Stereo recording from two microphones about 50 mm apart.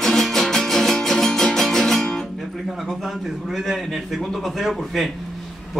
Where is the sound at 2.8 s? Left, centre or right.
Centre.